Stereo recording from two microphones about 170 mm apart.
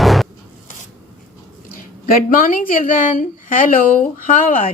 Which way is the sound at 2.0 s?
55° left (ahead or behind).